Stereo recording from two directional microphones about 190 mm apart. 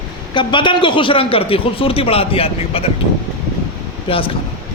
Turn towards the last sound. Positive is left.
turn(degrees=30)  # may be behind; listen again after turning